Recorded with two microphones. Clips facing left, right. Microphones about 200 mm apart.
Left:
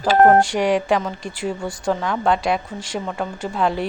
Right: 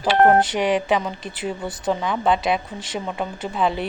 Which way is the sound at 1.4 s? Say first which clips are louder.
Left 2 dB; 5° right (ahead or behind).